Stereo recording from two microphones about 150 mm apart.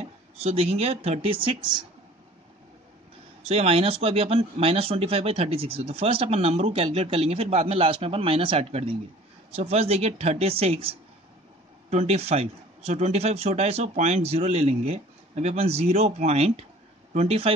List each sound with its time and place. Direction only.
0.0 s speech: 45° right (ahead or behind)
3.4 s a man's voice: 45° right (ahead or behind)